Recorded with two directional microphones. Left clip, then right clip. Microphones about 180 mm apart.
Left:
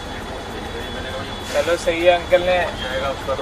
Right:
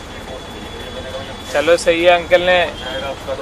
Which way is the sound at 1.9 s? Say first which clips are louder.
Right 1 dB; 50° right (ahead or behind).